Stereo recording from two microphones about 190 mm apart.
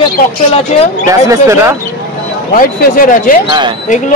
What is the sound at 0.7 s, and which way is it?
Speech, 35° left (ahead or behind).